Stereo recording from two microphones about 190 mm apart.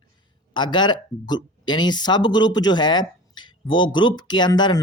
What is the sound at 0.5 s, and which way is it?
Speech, 25° left (ahead or behind).